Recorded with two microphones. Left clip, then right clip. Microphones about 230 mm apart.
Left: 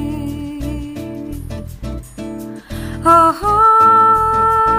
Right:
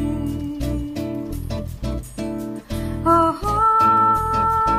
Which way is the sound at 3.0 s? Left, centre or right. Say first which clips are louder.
Left 7 dB; left.